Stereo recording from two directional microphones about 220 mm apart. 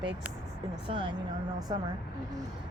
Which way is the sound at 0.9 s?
20° right (ahead or behind).